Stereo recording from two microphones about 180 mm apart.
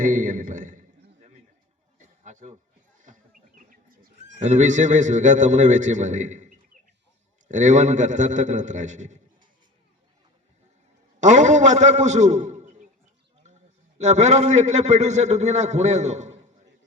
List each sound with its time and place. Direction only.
0.0 s a sound: 45° right (ahead or behind)
3.0 s bird: 45° right (ahead or behind)
4.4 s a man's voice: 40° right (ahead or behind)
11.2 s a man's voice: 40° right (ahead or behind)
14.0 s a man's voice: 40° right (ahead or behind)